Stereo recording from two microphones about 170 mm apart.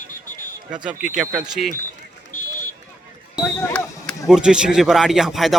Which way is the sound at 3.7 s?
Centre (ahead or behind).